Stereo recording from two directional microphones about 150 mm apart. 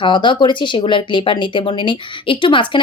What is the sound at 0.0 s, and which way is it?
Speech, 30° left (ahead or behind).